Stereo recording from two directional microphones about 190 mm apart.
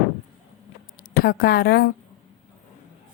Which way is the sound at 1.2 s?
55° left (ahead or behind).